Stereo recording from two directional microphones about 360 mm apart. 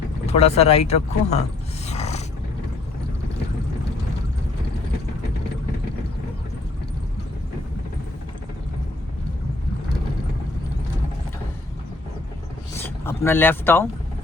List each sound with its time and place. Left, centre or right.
0.3 s speech: centre
1.9 s a sound: centre
12.7 s speech: centre